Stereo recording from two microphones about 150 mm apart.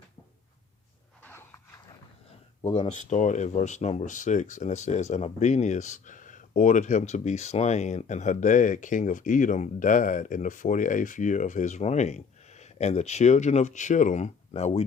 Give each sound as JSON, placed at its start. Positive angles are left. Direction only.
{"t": 1.2, "sound": "dog", "side_deg": 15}
{"t": 2.6, "sound": "speech", "side_deg": 45}